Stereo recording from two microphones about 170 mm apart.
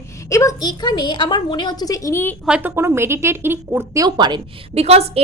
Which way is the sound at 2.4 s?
10° right (ahead or behind).